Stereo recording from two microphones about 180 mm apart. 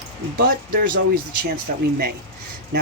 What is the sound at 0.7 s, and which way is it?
Speech, 50° right (ahead or behind).